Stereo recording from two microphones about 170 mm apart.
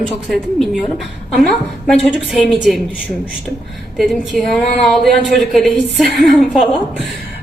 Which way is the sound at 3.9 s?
Centre (ahead or behind).